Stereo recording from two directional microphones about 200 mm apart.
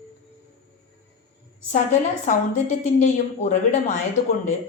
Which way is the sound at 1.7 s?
35° left (ahead or behind).